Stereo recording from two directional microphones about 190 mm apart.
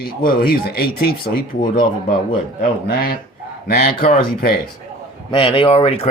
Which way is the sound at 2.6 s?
50° left (ahead or behind).